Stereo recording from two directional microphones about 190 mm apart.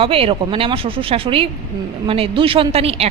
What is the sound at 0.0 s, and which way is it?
A woman's voice, 30° right (ahead or behind).